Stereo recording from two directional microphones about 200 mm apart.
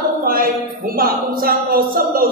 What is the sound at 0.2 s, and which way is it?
A woman's voice, 45° right (ahead or behind).